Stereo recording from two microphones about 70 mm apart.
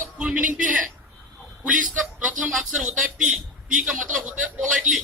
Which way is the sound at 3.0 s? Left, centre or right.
Centre.